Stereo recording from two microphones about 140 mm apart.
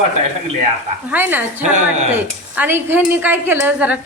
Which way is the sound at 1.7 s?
55° right (ahead or behind).